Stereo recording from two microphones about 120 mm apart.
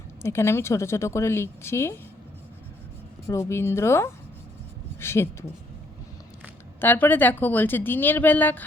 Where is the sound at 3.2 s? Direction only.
25° left (ahead or behind).